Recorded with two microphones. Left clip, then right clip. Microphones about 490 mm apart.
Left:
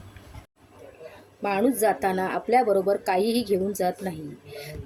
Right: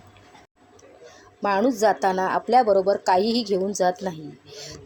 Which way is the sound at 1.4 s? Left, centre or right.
Left.